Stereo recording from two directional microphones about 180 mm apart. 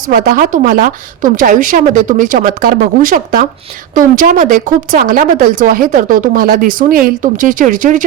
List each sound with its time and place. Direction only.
0.1 s speech: 50° right (ahead or behind)